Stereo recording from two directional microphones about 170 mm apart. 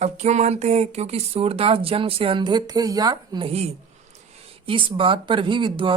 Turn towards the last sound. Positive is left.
turn(degrees=-30)  # may be behind; listen again after turning